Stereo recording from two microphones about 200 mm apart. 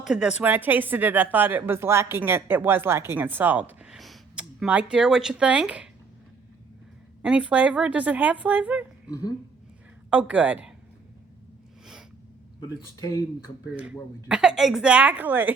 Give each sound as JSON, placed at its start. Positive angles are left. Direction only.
{"t": 0.0, "sound": "speech", "side_deg": -5}
{"t": 7.2, "sound": "speech", "side_deg": -5}
{"t": 10.1, "sound": "a woman's voice", "side_deg": -5}
{"t": 12.5, "sound": "speech", "side_deg": 20}
{"t": 13.7, "sound": "speech", "side_deg": -5}